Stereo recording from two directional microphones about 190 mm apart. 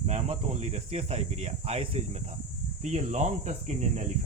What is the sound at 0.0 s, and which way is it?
Speech, 35° right (ahead or behind).